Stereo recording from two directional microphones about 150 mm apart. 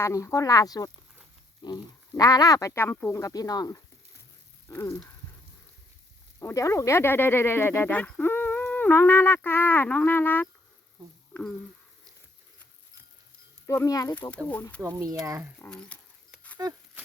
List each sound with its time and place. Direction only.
0.0 s speech: 20° left (ahead or behind)
6.4 s speech: 20° left (ahead or behind)
13.7 s speech: 20° left (ahead or behind)
14.5 s speech: 10° left (ahead or behind)
14.8 s speech: 20° right (ahead or behind)
15.5 s speech: 10° left (ahead or behind)